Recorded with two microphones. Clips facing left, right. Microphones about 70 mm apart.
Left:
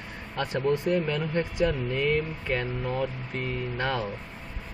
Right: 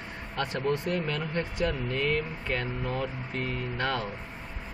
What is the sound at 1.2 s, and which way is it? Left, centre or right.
Speech, left.